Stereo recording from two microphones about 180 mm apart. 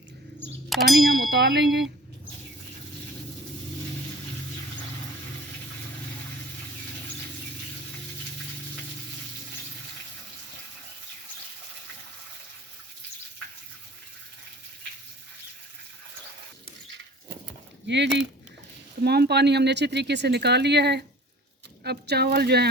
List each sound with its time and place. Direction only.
0.7 s ding: centre (ahead or behind)
1.3 s speech: 70° right (ahead or behind)
17.8 s speech: 75° right (ahead or behind)
19.0 s speech: 65° right (ahead or behind)